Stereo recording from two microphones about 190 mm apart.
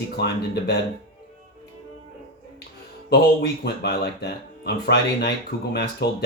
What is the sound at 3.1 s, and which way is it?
Speech, 60° left (ahead or behind).